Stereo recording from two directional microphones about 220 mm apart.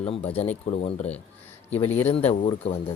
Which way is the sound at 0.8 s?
30° left (ahead or behind).